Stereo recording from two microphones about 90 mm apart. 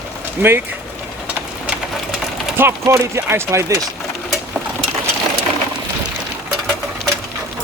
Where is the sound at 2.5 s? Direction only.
25° right (ahead or behind).